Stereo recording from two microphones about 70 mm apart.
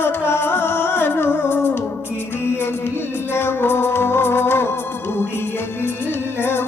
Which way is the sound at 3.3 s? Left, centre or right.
Left.